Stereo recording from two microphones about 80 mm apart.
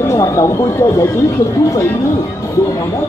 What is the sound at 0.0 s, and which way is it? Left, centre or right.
Speech, left.